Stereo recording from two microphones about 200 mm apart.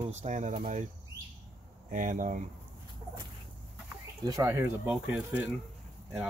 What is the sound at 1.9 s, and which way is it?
Speech, 40° right (ahead or behind).